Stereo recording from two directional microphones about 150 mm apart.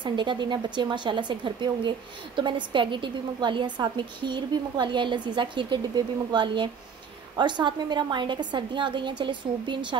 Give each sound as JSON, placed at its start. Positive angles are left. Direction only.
{"t": 0.0, "sound": "speech", "side_deg": -30}